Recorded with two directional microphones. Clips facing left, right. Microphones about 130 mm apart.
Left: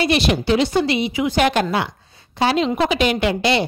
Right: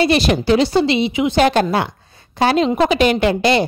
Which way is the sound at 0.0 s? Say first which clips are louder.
Right 3 dB; 40° right (ahead or behind).